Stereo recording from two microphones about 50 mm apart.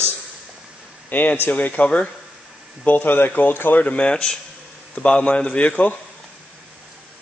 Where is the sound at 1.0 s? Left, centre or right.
Left.